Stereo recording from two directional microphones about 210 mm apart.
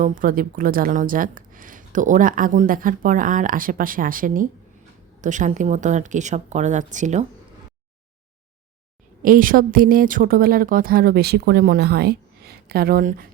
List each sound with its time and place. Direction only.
0.0 s speech: 40° right (ahead or behind)
9.2 s a woman's voice: 40° right (ahead or behind)